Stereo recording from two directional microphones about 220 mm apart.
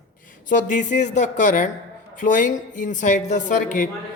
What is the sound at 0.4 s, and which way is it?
Speech, 35° left (ahead or behind).